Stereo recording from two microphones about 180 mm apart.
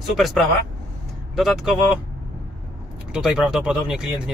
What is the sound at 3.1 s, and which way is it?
Speech, 5° right (ahead or behind).